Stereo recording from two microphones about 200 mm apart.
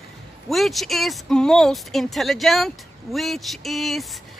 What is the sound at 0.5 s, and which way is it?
Speech, centre (ahead or behind).